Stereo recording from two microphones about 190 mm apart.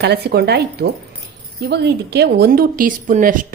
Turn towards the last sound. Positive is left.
turn(degrees=-45)  # may be behind; listen again after turning